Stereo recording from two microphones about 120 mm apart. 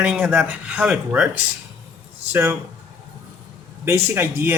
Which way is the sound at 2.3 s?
20° right (ahead or behind).